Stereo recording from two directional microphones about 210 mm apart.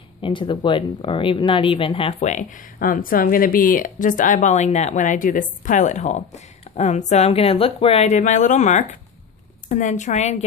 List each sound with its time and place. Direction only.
0.2 s speech: 25° left (ahead or behind)